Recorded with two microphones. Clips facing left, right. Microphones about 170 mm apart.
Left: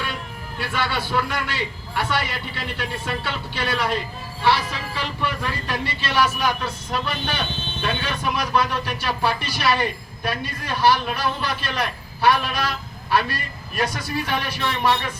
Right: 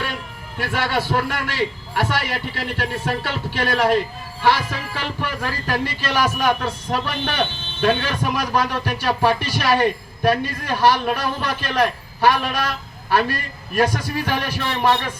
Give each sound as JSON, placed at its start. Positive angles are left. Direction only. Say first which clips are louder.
{"t": 0.6, "sound": "a man's voice", "louder": "right 4 dB", "side_deg": -50}
{"t": 5.2, "sound": "a man's voice", "louder": "even", "side_deg": -45}